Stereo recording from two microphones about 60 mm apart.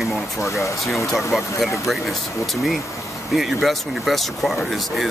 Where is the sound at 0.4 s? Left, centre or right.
Left.